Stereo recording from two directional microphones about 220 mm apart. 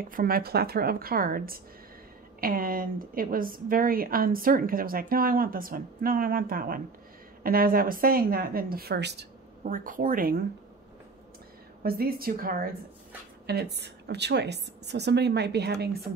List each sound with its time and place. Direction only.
0.1 s a woman's voice: 40° right (ahead or behind)
11.8 s a woman's voice: 40° right (ahead or behind)